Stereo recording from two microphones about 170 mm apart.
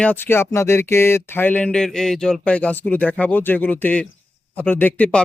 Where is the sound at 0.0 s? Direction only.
10° left (ahead or behind).